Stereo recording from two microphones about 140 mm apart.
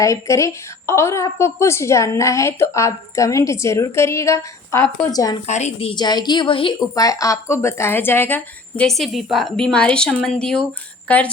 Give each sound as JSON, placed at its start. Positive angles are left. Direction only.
{"t": 0.0, "sound": "a woman's voice", "side_deg": 20}
{"t": 5.5, "sound": "a woman's voice", "side_deg": 55}
{"t": 5.9, "sound": "a woman's voice", "side_deg": 30}